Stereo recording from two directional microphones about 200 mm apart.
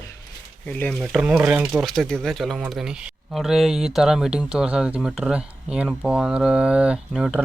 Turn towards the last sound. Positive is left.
turn(degrees=0)  # may be behind; listen again after turning